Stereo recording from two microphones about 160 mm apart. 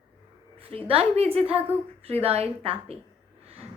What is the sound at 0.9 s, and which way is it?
A woman's voice, 40° right (ahead or behind).